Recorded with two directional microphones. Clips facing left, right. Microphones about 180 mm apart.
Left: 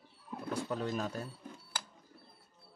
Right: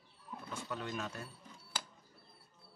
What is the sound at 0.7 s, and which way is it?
Speech, 35° left (ahead or behind).